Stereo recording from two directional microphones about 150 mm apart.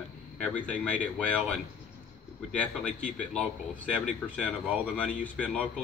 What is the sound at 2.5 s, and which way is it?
Speech, 10° left (ahead or behind).